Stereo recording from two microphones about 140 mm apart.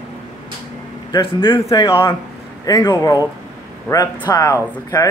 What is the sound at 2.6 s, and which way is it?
Speech, 25° left (ahead or behind).